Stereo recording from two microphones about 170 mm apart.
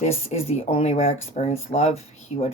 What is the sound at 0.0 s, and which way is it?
Speech, 40° left (ahead or behind).